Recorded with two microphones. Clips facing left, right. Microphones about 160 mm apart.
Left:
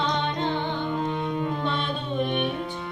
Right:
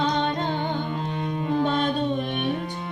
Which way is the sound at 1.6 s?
40° right (ahead or behind).